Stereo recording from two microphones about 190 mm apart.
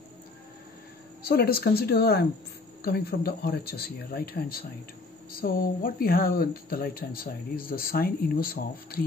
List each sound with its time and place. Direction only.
1.2 s speech: 55° left (ahead or behind)